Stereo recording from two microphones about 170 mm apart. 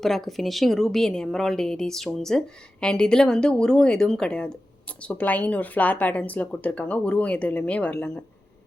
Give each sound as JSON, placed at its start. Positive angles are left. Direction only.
{"t": 0.0, "sound": "a woman's voice", "side_deg": 0}